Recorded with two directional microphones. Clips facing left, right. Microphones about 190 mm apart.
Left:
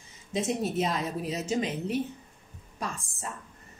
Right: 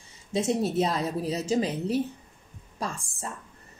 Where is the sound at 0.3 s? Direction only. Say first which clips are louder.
Right 3 dB; 35° right (ahead or behind).